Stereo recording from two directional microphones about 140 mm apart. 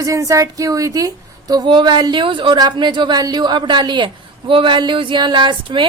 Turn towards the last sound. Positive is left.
turn(degrees=-35)  # may be behind; listen again after turning